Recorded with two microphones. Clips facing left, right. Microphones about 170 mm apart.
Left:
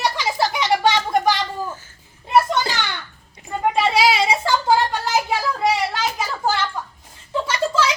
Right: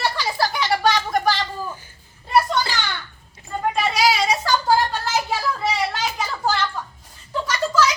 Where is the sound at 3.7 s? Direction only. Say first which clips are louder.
Left 2 dB; 25° left (ahead or behind).